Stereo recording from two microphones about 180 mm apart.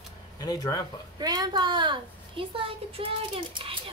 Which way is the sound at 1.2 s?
20° right (ahead or behind).